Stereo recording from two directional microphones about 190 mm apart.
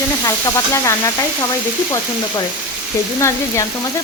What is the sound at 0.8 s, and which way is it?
Speech, 15° left (ahead or behind).